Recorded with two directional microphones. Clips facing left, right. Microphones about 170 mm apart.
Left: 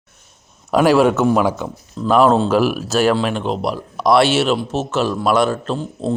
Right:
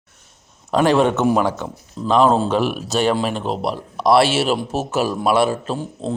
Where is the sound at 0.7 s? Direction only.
5° left (ahead or behind); by 5.9 s 10° right (ahead or behind).